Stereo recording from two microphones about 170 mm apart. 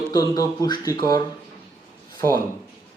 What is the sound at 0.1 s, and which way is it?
Speech, 20° left (ahead or behind).